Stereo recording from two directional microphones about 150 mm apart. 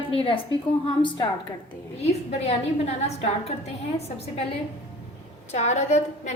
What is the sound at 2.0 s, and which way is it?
A woman's voice, 45° left (ahead or behind).